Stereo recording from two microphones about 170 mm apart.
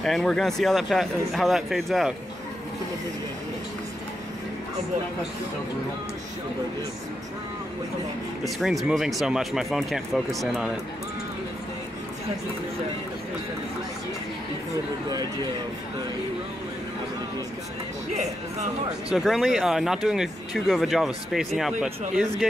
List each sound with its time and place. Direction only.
0.0 s speech: centre (ahead or behind)
8.5 s speech: centre (ahead or behind)
18.1 s speech: 45° right (ahead or behind)
19.1 s speech: centre (ahead or behind)